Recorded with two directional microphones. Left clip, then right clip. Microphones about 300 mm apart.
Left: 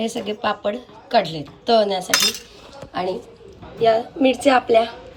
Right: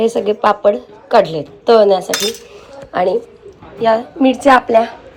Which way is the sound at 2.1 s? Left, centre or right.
Centre.